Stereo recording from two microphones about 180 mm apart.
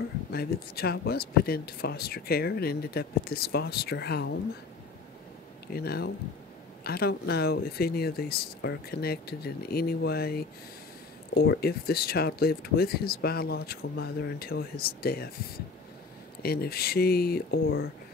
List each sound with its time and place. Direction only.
0.3 s speech: 60° left (ahead or behind)
5.7 s speech: 60° left (ahead or behind)
16.4 s speech: 60° left (ahead or behind)